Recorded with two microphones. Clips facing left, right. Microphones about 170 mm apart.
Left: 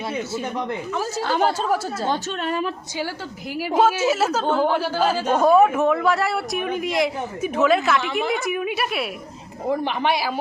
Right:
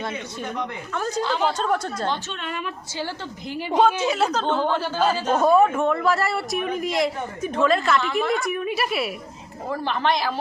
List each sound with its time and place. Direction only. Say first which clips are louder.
0.9 s speech: right 3 dB; 5° left (ahead or behind)
1.2 s speech: left 3 dB; 50° left (ahead or behind)
1.5 s speech: left 1 dB; 5° left (ahead or behind)
2.0 s a woman's voice: left 4 dB; 40° left (ahead or behind)
3.5 s speech: left 1 dB; 5° left (ahead or behind)
9.6 s speech: left 2 dB; 15° left (ahead or behind)